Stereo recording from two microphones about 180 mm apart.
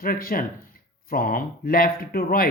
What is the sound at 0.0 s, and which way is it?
Speech, 55° left (ahead or behind).